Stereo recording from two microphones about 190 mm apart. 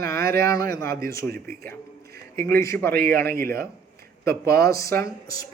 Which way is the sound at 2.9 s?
50° right (ahead or behind).